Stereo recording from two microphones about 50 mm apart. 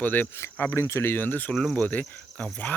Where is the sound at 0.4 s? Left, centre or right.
Left.